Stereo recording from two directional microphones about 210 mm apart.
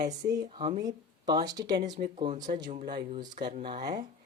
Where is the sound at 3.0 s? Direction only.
20° right (ahead or behind).